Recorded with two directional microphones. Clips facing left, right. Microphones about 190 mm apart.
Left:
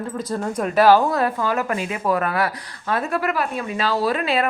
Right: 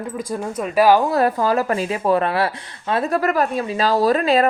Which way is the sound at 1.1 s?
35° right (ahead or behind).